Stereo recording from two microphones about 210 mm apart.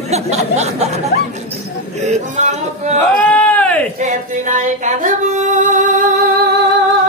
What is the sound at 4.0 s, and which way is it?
Music, 35° right (ahead or behind).